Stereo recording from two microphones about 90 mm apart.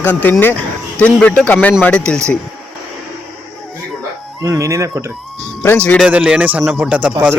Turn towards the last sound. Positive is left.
turn(degrees=-15)  # may be behind; listen again after turning